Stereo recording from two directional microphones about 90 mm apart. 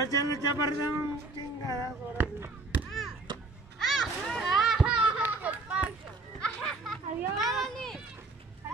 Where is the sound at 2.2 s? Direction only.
20° right (ahead or behind).